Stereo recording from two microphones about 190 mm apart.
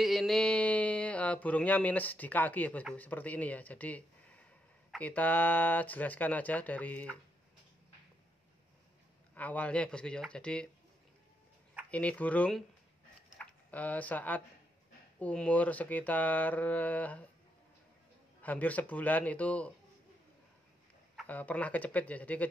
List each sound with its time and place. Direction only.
0.0 s speech: centre (ahead or behind)
9.3 s speech: 10° left (ahead or behind)
11.9 s speech: 5° left (ahead or behind)
18.4 s speech: 10° left (ahead or behind)
21.2 s speech: 10° left (ahead or behind)